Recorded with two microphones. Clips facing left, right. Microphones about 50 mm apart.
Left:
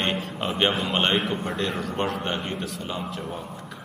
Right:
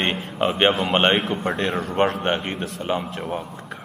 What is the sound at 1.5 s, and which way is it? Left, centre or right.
A man's voice, right.